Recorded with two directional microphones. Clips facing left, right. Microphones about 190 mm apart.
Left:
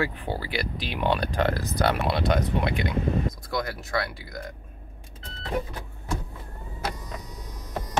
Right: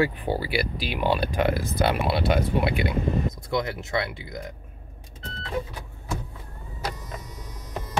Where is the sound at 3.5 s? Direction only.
20° right (ahead or behind).